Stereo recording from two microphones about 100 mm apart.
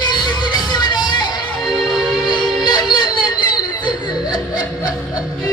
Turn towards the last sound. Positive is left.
turn(degrees=40)  # may be behind; listen again after turning